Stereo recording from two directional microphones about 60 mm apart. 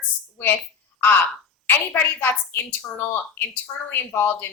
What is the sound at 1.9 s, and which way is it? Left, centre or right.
Speech, left.